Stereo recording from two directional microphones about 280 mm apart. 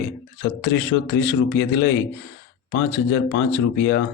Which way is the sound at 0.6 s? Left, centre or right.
Left.